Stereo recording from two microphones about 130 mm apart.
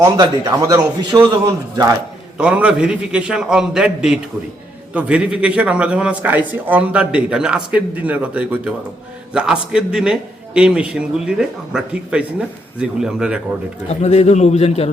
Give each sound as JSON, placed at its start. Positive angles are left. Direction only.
{"t": 0.2, "sound": "a man's voice", "side_deg": -30}
{"t": 2.4, "sound": "a man's voice", "side_deg": -10}
{"t": 14.0, "sound": "a man's voice", "side_deg": 55}